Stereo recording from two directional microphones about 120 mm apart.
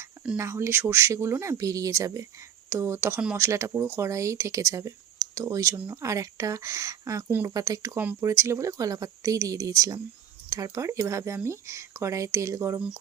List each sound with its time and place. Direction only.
0.3 s speech: 25° right (ahead or behind)